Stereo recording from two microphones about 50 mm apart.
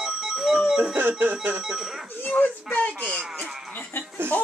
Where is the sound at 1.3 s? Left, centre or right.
Right.